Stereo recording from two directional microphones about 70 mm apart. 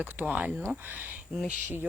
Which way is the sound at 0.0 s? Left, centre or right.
Right.